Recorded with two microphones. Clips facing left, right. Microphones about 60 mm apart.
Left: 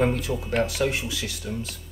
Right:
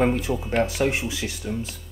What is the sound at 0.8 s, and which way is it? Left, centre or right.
Speech, right.